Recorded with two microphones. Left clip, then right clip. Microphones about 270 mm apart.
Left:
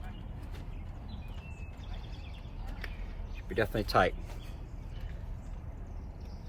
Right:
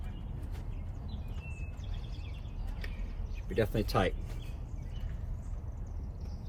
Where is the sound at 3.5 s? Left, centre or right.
Centre.